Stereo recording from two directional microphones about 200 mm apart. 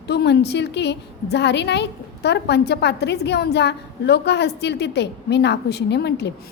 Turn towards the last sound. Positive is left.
turn(degrees=55)  # may be behind; listen again after turning